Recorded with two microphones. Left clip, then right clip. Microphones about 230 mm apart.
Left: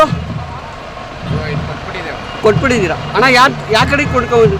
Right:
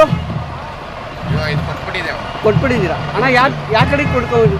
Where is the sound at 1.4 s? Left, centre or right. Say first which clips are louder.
Right 3 dB; centre.